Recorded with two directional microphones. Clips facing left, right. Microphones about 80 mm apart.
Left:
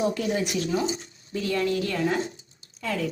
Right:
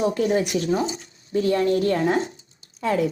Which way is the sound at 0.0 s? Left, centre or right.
Right.